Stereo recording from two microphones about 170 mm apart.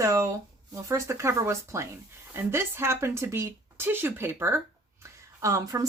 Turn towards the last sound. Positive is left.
turn(degrees=-20)  # may be behind; listen again after turning